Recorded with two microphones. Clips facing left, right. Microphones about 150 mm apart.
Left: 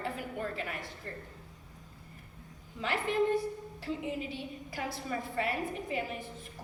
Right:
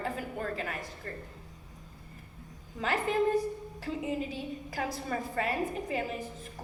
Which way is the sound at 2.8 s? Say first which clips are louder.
Right 2 dB; 40° right (ahead or behind).